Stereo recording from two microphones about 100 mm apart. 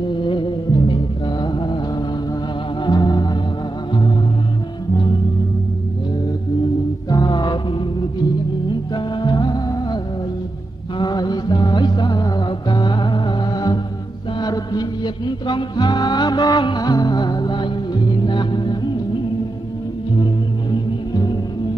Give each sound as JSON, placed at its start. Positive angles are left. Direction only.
{"t": 0.1, "sound": "music", "side_deg": 55}
{"t": 1.4, "sound": "mantra", "side_deg": 50}
{"t": 2.8, "sound": "music", "side_deg": 45}
{"t": 7.1, "sound": "mantra", "side_deg": 40}
{"t": 8.9, "sound": "music", "side_deg": 45}
{"t": 11.0, "sound": "music", "side_deg": 45}
{"t": 20.7, "sound": "music", "side_deg": 45}